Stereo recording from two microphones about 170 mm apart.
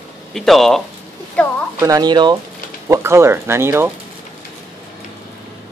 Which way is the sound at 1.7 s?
20° right (ahead or behind).